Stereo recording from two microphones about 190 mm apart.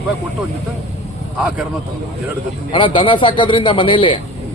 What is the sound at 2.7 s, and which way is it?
Speech, 25° left (ahead or behind).